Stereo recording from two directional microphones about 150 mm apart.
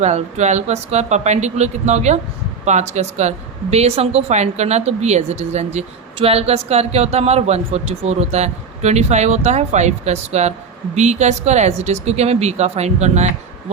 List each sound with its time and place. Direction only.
0.0 s speech: 50° right (ahead or behind)